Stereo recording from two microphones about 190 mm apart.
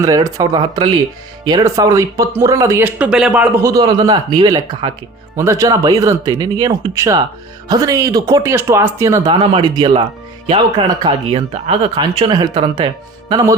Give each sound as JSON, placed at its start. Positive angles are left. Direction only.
{"t": 0.0, "sound": "speech", "side_deg": -20}
{"t": 9.3, "sound": "speech", "side_deg": -30}